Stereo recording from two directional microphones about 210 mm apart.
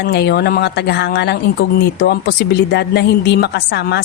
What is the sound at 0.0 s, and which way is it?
Speech, 50° left (ahead or behind).